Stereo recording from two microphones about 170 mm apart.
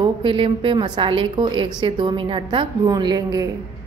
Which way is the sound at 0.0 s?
30° right (ahead or behind).